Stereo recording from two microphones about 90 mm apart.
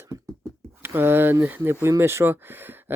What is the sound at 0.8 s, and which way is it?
Speech, 25° right (ahead or behind).